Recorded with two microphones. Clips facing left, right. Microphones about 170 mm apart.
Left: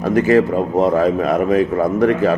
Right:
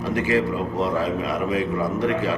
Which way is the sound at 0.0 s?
50° left (ahead or behind).